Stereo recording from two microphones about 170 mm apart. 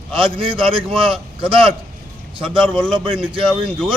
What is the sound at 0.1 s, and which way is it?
A man's voice, 30° right (ahead or behind).